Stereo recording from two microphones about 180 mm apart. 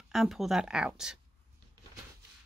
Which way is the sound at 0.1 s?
Centre (ahead or behind).